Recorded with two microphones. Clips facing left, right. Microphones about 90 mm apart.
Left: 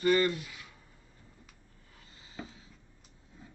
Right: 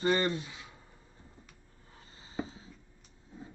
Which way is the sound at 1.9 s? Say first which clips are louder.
Right 7 dB; 30° right (ahead or behind).